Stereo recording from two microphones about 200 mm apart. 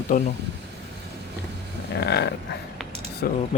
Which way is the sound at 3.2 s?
50° left (ahead or behind).